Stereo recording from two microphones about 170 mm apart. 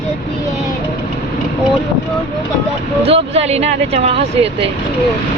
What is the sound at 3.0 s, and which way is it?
Speech, 35° right (ahead or behind).